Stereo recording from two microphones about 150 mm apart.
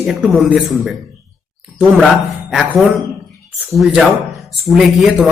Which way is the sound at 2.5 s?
5° right (ahead or behind).